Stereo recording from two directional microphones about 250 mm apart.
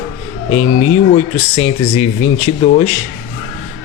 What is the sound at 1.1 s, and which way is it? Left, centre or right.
Speech, left.